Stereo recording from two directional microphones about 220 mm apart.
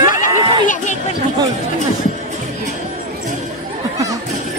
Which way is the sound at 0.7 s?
35° left (ahead or behind).